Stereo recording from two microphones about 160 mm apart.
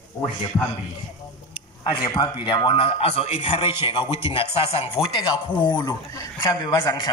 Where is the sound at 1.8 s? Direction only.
30° left (ahead or behind).